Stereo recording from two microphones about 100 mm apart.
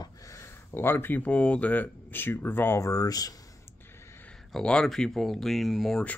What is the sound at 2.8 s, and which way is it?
Speech, 35° left (ahead or behind).